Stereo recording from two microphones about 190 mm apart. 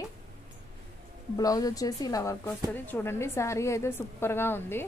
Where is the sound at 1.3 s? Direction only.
20° left (ahead or behind).